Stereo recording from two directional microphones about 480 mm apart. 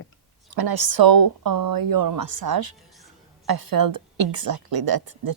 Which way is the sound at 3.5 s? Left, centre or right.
Right.